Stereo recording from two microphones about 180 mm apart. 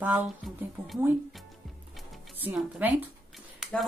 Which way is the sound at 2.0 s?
10° right (ahead or behind).